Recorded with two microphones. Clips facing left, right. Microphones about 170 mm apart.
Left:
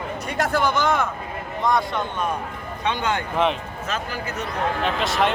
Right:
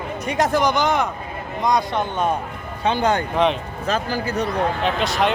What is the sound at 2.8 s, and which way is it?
Speech, 35° right (ahead or behind).